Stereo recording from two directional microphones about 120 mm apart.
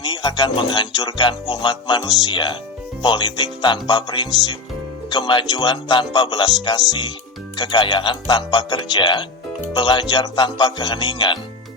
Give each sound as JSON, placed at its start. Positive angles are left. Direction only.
{"t": 0.0, "sound": "speech", "side_deg": 35}